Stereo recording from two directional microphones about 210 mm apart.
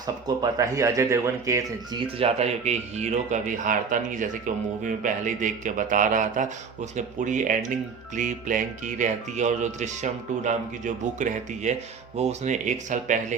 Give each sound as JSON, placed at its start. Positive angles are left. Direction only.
{"t": 0.4, "sound": "speech", "side_deg": -15}
{"t": 2.1, "sound": "speech", "side_deg": -30}